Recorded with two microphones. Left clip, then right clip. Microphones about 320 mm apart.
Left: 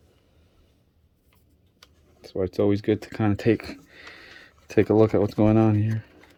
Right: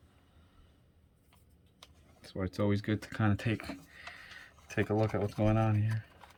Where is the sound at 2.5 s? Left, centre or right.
Centre.